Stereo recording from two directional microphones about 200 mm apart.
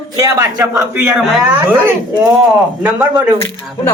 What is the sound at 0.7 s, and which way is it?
Speech, 5° right (ahead or behind).